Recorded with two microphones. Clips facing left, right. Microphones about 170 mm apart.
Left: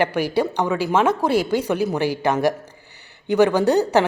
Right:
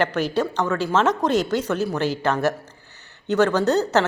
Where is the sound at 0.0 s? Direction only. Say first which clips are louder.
Left 2 dB; 10° left (ahead or behind).